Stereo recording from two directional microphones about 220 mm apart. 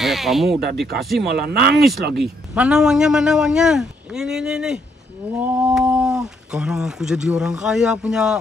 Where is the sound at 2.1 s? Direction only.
Centre (ahead or behind).